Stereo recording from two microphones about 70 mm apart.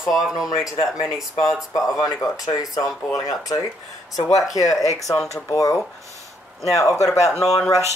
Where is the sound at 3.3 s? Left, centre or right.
Left.